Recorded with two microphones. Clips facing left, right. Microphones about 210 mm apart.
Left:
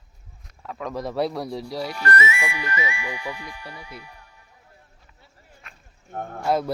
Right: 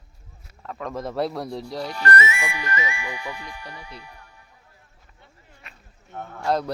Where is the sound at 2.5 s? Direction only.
50° right (ahead or behind).